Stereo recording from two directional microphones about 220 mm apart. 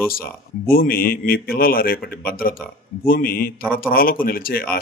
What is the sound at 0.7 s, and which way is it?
Speech, 40° left (ahead or behind).